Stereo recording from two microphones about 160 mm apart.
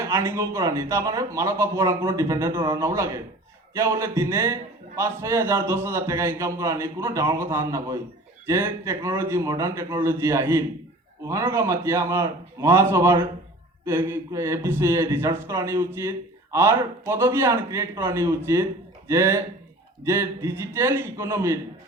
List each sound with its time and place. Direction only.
0.0 s speech: 15° right (ahead or behind)